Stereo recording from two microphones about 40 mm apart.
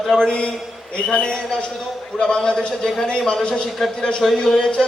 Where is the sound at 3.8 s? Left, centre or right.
Centre.